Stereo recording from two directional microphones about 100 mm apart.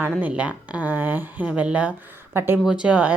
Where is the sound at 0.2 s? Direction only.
15° right (ahead or behind).